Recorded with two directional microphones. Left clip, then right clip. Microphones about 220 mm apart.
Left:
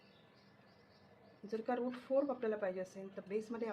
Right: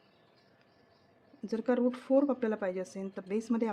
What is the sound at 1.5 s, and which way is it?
A woman's voice, 50° right (ahead or behind).